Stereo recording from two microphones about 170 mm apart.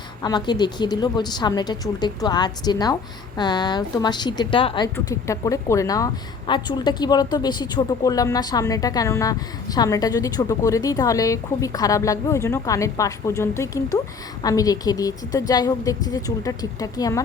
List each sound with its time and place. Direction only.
0.2 s speech: 25° left (ahead or behind)
4.9 s speech: 15° left (ahead or behind)